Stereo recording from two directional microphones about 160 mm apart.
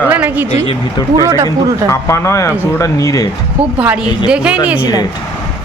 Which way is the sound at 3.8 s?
10° right (ahead or behind).